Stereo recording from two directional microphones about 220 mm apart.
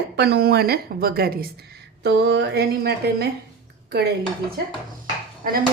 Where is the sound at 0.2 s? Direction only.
45° right (ahead or behind).